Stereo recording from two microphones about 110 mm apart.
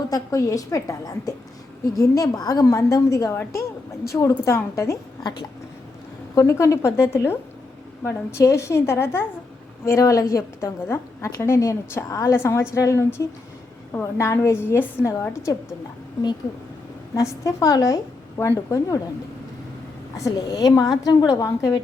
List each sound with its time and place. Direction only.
0.1 s a woman's voice: 30° left (ahead or behind)
6.3 s a woman's voice: 30° left (ahead or behind)
8.0 s a woman's voice: 25° left (ahead or behind)
17.2 s a woman's voice: 30° left (ahead or behind)
18.3 s a woman's voice: 25° left (ahead or behind)
20.1 s a woman's voice: 30° left (ahead or behind)